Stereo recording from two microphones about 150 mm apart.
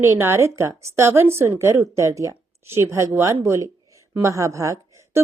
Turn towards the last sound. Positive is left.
turn(degrees=-20)  # may be behind; listen again after turning